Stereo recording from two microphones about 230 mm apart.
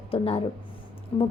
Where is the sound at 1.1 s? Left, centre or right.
Centre.